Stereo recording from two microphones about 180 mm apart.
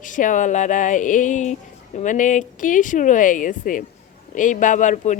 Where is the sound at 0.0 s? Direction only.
45° left (ahead or behind).